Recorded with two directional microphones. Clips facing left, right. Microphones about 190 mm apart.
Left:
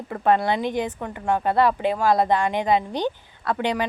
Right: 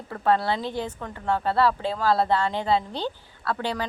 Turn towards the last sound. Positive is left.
turn(degrees=15)  # may be behind; listen again after turning